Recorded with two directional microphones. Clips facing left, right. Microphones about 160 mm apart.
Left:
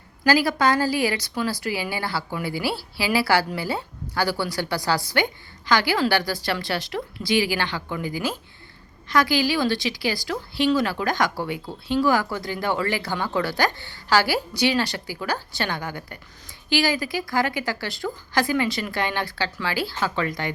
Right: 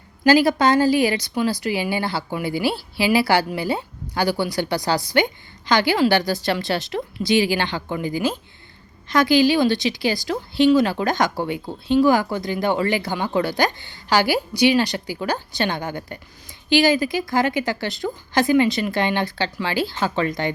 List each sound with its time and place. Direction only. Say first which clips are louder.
0.3 s a woman's voice: right 4 dB; 20° right (ahead or behind)